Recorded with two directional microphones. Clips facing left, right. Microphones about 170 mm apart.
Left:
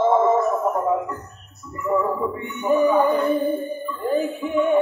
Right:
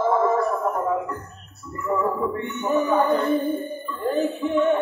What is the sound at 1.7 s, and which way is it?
Music, 15° left (ahead or behind).